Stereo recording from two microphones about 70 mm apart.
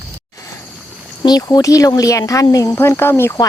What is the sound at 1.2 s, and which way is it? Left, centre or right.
Speech, left.